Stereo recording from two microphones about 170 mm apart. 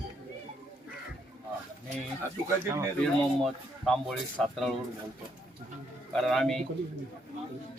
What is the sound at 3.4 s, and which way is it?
Speech, centre (ahead or behind).